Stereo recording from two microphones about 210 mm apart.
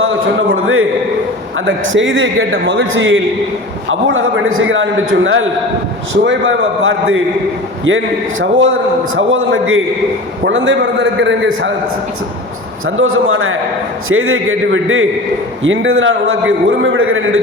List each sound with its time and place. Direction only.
0.0 s a man's voice: 75° right (ahead or behind)
1.5 s a man's voice: 65° right (ahead or behind)
10.4 s a man's voice: 60° right (ahead or behind)
12.8 s a man's voice: 75° right (ahead or behind)